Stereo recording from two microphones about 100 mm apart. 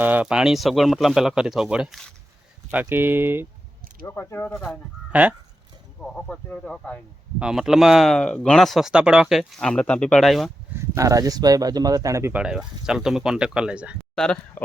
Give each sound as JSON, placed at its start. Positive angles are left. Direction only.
{"t": 0.0, "sound": "speech", "side_deg": -15}
{"t": 2.6, "sound": "speech", "side_deg": -20}
{"t": 4.0, "sound": "speech", "side_deg": 25}
{"t": 4.5, "sound": "speech", "side_deg": 5}
{"t": 5.1, "sound": "speech", "side_deg": -15}
{"t": 6.0, "sound": "speech", "side_deg": 5}
{"t": 7.3, "sound": "speech", "side_deg": -5}
{"t": 10.9, "sound": "speech", "side_deg": -35}
{"t": 12.3, "sound": "speech", "side_deg": -10}
{"t": 14.2, "sound": "speech", "side_deg": 5}